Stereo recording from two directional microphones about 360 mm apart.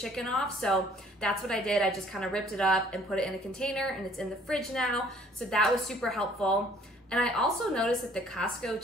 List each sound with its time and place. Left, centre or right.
0.0 s a woman's voice: centre